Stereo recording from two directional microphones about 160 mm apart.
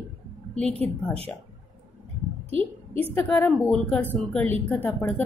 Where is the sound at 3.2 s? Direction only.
10° left (ahead or behind).